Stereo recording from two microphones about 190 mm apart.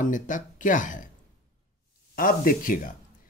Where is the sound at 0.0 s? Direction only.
45° left (ahead or behind).